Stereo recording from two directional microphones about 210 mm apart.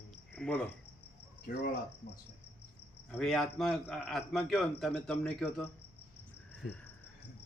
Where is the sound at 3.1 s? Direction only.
Centre (ahead or behind).